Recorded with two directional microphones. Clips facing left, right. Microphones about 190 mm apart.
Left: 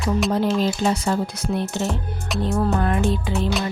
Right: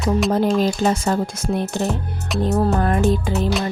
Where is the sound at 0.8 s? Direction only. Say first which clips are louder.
Right 2 dB; 45° right (ahead or behind).